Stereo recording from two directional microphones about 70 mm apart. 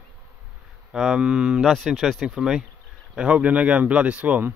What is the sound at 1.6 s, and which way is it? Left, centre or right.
Speech, centre.